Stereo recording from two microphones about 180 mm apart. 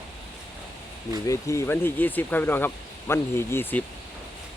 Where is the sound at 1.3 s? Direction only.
15° left (ahead or behind).